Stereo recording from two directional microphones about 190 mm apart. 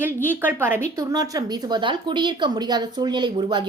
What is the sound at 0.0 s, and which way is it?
A woman's voice, 10° right (ahead or behind).